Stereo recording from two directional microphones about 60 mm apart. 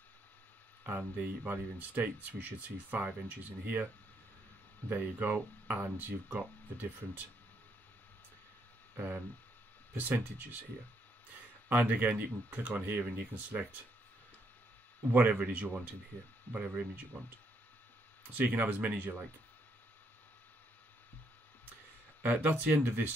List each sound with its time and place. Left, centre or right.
0.8 s speech: right
8.9 s speech: right
11.7 s speech: right
15.0 s speech: right
18.4 s speech: right
22.2 s speech: right